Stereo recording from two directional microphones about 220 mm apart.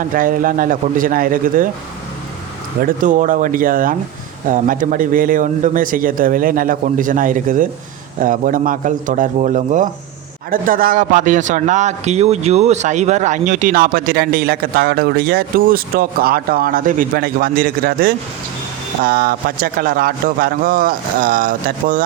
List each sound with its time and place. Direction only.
0.0 s a man's voice: 40° right (ahead or behind)
2.8 s a man's voice: 35° right (ahead or behind)